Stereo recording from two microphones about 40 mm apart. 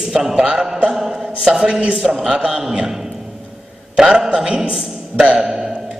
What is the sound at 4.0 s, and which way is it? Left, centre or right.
A man's voice, centre.